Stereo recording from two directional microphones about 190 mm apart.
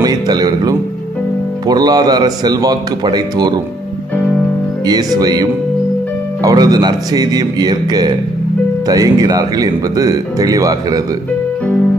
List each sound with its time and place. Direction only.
0.0 s speech: 20° right (ahead or behind)
4.8 s speech: 20° right (ahead or behind)